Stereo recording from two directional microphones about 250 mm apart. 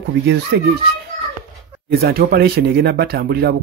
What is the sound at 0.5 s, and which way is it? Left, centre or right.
Speech, right.